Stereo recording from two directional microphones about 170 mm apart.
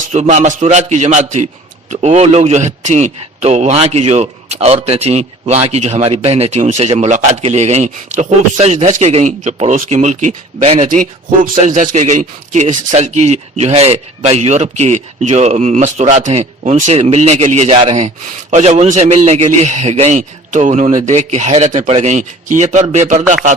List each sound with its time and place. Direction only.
0.1 s a man's voice: 40° right (ahead or behind)